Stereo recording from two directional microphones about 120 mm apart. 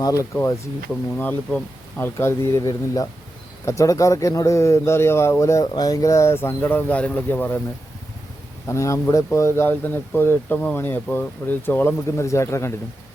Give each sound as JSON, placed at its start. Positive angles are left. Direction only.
{"t": 0.0, "sound": "speech", "side_deg": 30}
{"t": 1.2, "sound": "speech", "side_deg": 10}
{"t": 8.6, "sound": "speech", "side_deg": 25}